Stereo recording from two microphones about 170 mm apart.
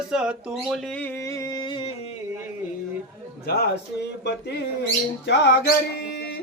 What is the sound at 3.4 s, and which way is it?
Speech, 70° left (ahead or behind).